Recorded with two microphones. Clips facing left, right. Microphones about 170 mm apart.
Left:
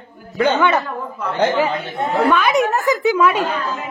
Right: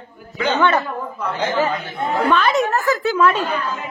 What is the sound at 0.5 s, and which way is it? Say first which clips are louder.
Speech: right 2 dB; 10° left (ahead or behind).